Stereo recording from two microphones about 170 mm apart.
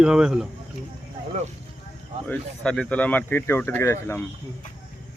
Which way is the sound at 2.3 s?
5° left (ahead or behind).